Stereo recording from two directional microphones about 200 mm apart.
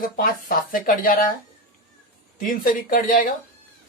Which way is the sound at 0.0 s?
45° left (ahead or behind).